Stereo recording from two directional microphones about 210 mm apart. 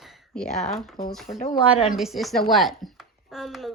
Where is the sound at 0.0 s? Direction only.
Centre (ahead or behind).